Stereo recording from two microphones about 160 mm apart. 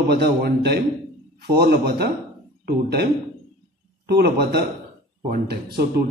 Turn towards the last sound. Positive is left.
turn(degrees=-80)